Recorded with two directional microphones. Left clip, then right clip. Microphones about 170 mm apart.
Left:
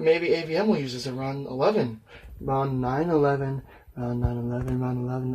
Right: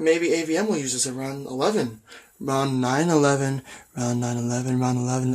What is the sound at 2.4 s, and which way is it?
Speech, 45° right (ahead or behind).